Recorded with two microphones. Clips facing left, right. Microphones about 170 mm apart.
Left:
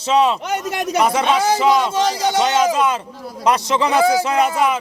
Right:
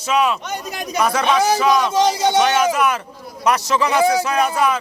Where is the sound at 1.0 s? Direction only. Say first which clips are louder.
Even; 25° left (ahead or behind).